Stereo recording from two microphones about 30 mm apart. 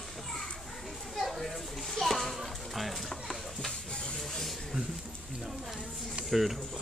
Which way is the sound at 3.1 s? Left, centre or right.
Centre.